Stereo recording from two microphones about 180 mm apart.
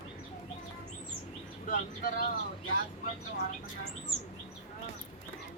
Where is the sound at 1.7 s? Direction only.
50° left (ahead or behind).